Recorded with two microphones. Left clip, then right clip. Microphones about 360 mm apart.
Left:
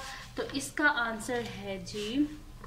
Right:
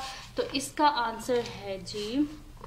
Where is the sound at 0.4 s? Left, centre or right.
Centre.